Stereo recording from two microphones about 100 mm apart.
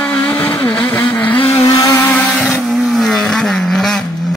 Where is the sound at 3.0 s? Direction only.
5° left (ahead or behind).